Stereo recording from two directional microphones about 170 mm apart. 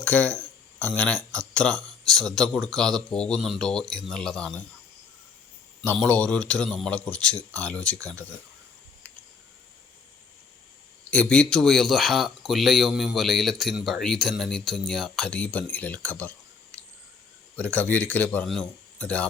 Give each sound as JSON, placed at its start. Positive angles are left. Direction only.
{"t": 0.0, "sound": "speech", "side_deg": 10}
{"t": 5.8, "sound": "speech", "side_deg": 10}
{"t": 11.1, "sound": "speech", "side_deg": 5}
{"t": 17.6, "sound": "speech", "side_deg": 10}